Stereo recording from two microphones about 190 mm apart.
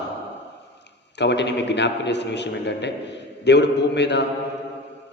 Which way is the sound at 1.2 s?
65° left (ahead or behind).